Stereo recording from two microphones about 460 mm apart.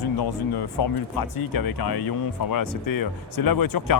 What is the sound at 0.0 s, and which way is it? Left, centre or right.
Speech, left.